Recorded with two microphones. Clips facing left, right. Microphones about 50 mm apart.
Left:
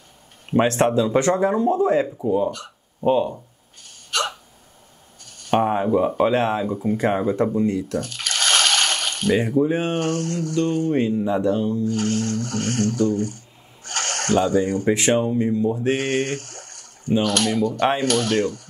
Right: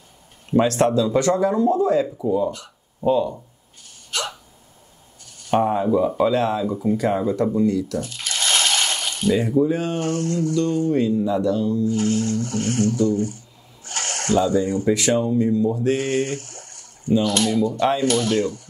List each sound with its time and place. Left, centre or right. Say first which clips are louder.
0.5 s speech: even; left
4.1 s hiccup: left 3 dB; left
5.2 s speech: even; left
8.0 s a sound: left 2 dB; left
9.6 s speech: even; left
9.9 s speech: right 1 dB; left